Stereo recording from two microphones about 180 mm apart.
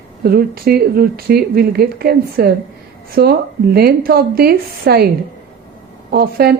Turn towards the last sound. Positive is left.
turn(degrees=-60)  # may be behind; listen again after turning